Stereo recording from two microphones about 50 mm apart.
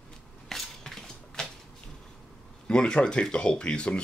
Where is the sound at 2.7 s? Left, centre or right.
Centre.